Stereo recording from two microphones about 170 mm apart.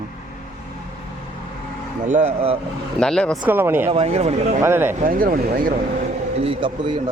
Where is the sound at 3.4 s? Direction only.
10° right (ahead or behind).